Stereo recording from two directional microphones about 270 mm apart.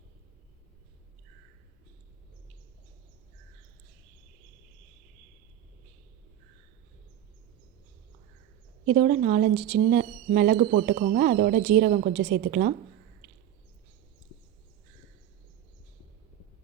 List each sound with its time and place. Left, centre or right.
9.0 s speech: right
12.1 s speech: right